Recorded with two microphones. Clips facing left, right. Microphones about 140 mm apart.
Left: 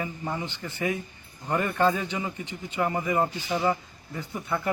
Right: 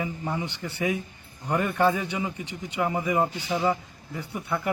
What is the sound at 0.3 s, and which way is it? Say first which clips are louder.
A man's voice: right 2 dB; 10° right (ahead or behind).